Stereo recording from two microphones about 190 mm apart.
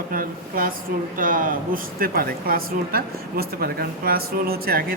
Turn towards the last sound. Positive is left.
turn(degrees=-50)  # may be behind; listen again after turning